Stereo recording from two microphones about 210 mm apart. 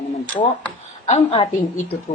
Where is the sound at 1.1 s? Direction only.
30° left (ahead or behind).